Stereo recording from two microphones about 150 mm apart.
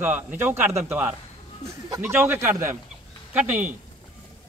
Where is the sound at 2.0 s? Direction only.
10° right (ahead or behind).